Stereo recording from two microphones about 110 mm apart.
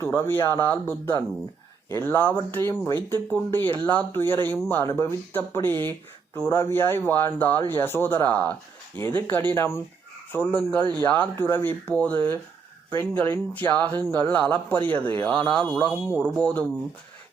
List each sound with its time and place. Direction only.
0.0 s speech: 20° left (ahead or behind)